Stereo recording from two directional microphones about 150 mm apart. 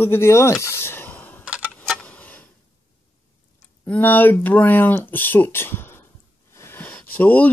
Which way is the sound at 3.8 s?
10° left (ahead or behind).